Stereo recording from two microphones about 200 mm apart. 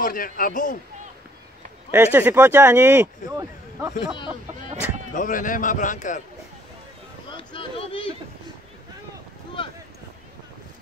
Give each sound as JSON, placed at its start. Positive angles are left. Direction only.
{"t": 0.0, "sound": "a man's voice", "side_deg": 45}
{"t": 1.9, "sound": "speech", "side_deg": -10}
{"t": 5.1, "sound": "a man's voice", "side_deg": 40}
{"t": 7.2, "sound": "a sound", "side_deg": 25}